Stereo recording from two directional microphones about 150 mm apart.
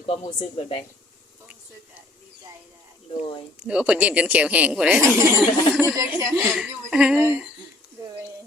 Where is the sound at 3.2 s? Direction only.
35° left (ahead or behind).